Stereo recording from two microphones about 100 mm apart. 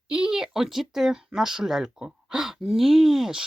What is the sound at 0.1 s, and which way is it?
Speech, 5° right (ahead or behind).